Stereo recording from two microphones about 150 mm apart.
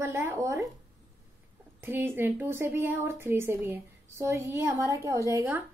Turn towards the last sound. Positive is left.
turn(degrees=-20)  # may be behind; listen again after turning